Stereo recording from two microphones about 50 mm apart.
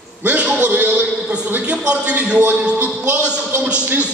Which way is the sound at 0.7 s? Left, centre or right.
Right.